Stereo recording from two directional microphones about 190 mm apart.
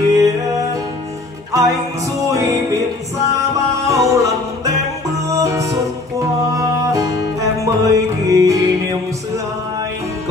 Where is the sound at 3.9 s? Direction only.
15° right (ahead or behind).